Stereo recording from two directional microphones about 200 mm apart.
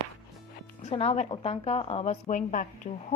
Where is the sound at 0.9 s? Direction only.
30° left (ahead or behind).